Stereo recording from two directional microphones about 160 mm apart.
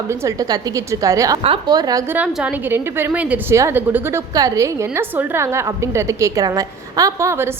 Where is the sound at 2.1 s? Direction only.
10° right (ahead or behind).